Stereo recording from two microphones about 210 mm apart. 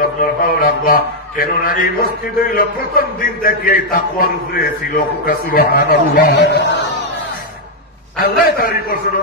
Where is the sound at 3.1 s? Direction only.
45° left (ahead or behind).